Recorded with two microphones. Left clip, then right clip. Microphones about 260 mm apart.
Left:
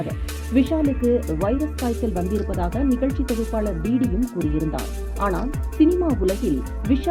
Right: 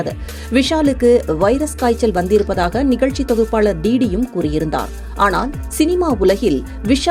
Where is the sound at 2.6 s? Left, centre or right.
Right.